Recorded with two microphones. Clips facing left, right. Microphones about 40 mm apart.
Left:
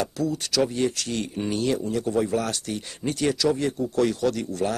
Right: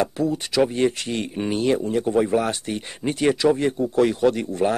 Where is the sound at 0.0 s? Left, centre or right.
Right.